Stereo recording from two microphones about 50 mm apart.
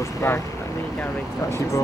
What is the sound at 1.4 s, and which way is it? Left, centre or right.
Speech, left.